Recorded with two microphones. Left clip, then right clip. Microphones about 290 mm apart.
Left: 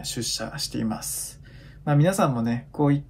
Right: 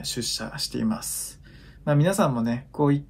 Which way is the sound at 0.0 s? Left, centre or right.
Centre.